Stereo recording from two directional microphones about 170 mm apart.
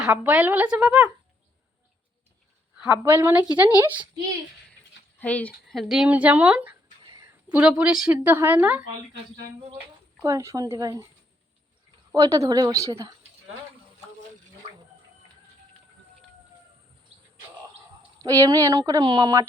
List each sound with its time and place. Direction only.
0.0 s a woman's voice: 5° right (ahead or behind)
2.7 s a sound: 5° right (ahead or behind)
3.0 s a woman's voice: 15° right (ahead or behind)
5.2 s speech: 10° left (ahead or behind)
5.8 s a woman's voice: 5° right (ahead or behind)
7.0 s a sound: 25° right (ahead or behind)
7.5 s a woman's voice: 5° right (ahead or behind)
10.2 s speech: 20° right (ahead or behind)
12.1 s speech: 20° right (ahead or behind)
18.2 s speech: 20° right (ahead or behind)